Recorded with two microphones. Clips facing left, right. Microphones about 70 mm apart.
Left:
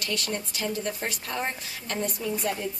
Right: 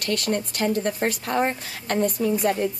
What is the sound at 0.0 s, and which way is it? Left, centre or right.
A woman's voice, right.